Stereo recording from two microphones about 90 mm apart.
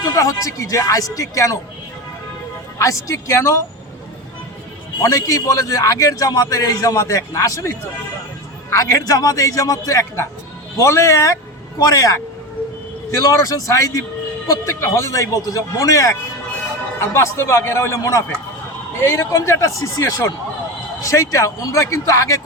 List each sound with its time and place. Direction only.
0.0 s a man's voice: 40° left (ahead or behind)
2.7 s a man's voice: 35° left (ahead or behind)
4.9 s a man's voice: 40° left (ahead or behind)
8.7 s a man's voice: 35° left (ahead or behind)